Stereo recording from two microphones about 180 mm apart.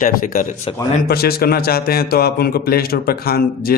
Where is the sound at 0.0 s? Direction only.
50° left (ahead or behind).